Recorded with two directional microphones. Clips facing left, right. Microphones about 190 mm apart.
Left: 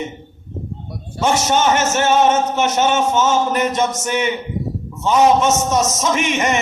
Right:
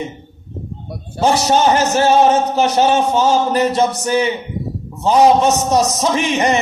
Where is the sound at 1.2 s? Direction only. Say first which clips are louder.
Right 3 dB; 35° right (ahead or behind).